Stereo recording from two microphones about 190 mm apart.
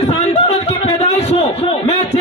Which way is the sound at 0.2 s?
35° left (ahead or behind).